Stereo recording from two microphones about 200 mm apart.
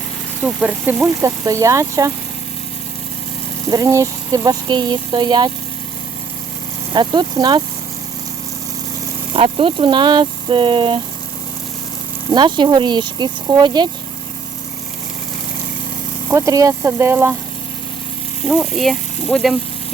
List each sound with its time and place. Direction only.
0.4 s speech: 5° right (ahead or behind)
3.7 s speech: 15° right (ahead or behind)
6.9 s speech: 20° right (ahead or behind)
9.3 s speech: 25° right (ahead or behind)
12.3 s speech: 20° right (ahead or behind)
16.3 s speech: 15° right (ahead or behind)
18.4 s speech: centre (ahead or behind)